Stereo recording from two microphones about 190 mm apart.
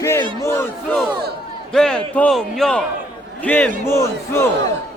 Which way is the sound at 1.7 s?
5° left (ahead or behind).